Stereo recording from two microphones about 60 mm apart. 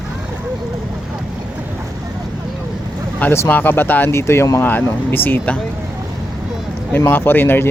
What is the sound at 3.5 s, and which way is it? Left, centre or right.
Speech, left.